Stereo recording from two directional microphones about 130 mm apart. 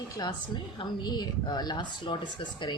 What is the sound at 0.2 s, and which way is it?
A woman's voice, 35° left (ahead or behind).